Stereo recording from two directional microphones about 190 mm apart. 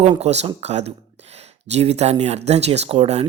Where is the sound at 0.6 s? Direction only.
35° right (ahead or behind).